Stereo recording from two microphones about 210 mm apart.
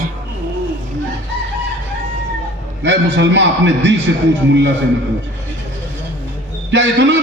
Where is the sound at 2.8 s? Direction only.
60° right (ahead or behind).